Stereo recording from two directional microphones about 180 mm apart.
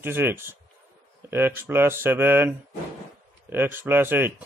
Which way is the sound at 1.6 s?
10° right (ahead or behind).